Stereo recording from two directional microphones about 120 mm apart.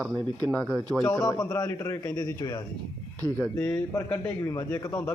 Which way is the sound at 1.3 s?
25° left (ahead or behind).